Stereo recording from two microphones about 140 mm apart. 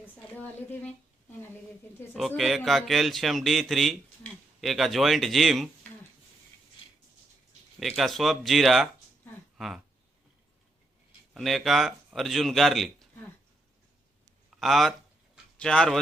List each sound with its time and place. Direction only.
0.3 s a woman's voice: 10° left (ahead or behind)
2.1 s speech: centre (ahead or behind)
7.8 s speech: centre (ahead or behind)
11.3 s speech: centre (ahead or behind)
14.6 s speech: centre (ahead or behind)